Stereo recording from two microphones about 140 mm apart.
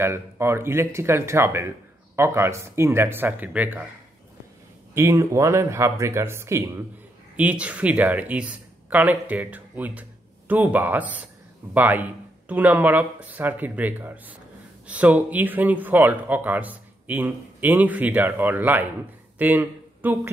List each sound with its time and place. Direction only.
0.0 s speech: 20° right (ahead or behind)
4.9 s speech: 20° right (ahead or behind)
19.3 s a sound: 15° right (ahead or behind)